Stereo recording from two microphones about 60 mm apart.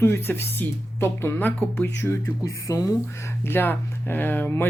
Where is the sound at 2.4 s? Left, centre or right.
Left.